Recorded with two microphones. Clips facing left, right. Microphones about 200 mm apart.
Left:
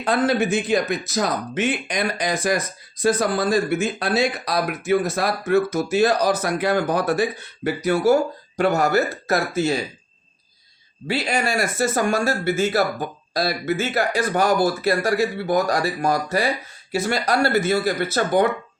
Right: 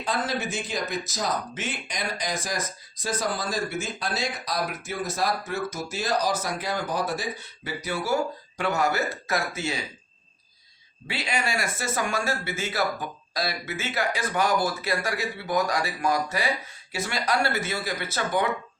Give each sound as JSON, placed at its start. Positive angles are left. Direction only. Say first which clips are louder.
{"t": 0.0, "sound": "speech", "louder": "left 9 dB", "side_deg": 60}
{"t": 11.1, "sound": "speech", "louder": "left 7 dB", "side_deg": 40}